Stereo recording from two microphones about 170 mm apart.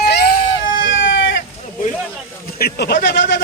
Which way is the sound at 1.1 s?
90° left.